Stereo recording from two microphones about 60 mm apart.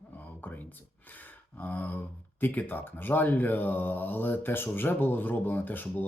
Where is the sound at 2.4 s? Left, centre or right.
Left.